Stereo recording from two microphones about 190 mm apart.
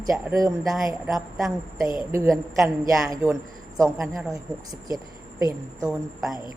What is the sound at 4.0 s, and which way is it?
Speech, centre (ahead or behind).